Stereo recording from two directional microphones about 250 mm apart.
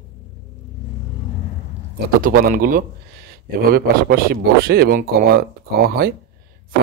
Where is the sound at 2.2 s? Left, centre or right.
Right.